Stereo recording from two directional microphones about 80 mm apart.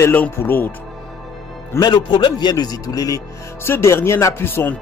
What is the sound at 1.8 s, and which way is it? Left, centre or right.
A man's voice, left.